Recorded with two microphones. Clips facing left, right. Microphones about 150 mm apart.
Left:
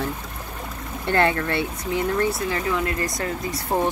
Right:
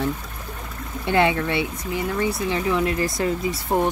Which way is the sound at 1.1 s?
15° right (ahead or behind).